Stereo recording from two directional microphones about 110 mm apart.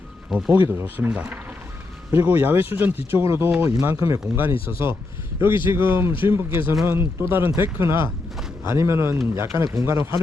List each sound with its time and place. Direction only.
0.3 s speech: 5° right (ahead or behind)
0.5 s speech: 20° right (ahead or behind)
5.6 s speech: 20° right (ahead or behind)